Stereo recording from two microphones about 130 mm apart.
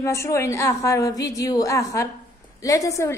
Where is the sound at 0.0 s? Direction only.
20° left (ahead or behind).